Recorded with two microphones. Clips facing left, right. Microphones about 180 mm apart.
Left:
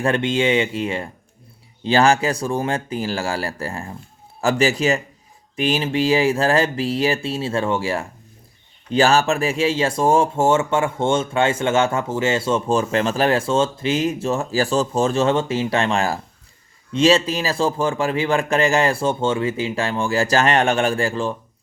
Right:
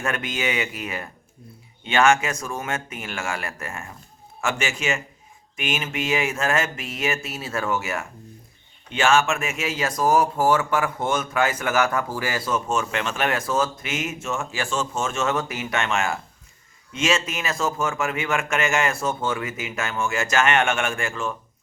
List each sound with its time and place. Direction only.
0.0 s speech: 30° left (ahead or behind)